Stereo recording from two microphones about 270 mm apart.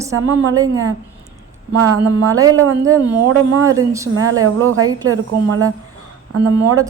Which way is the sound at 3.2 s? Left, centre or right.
Right.